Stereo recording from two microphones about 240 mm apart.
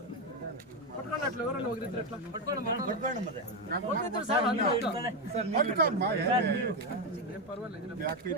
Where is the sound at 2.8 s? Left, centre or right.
Right.